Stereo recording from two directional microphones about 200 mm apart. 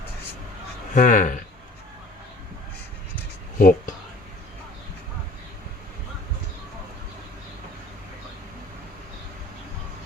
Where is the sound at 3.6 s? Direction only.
45° left (ahead or behind).